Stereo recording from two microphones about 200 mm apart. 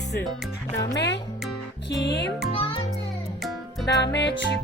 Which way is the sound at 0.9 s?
60° left (ahead or behind).